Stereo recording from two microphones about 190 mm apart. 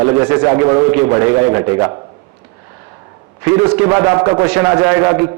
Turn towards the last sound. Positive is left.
turn(degrees=-10)  # may be behind; listen again after turning